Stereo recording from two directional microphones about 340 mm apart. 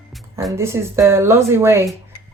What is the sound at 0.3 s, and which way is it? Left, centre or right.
A woman's voice, centre.